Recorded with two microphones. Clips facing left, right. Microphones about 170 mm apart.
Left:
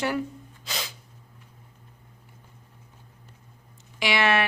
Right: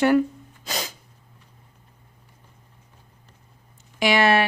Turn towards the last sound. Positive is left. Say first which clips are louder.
# right 5 dB
turn(degrees=-40)  # may be behind; listen again after turning